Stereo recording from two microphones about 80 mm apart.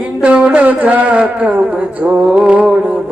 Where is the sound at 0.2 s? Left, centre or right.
Centre.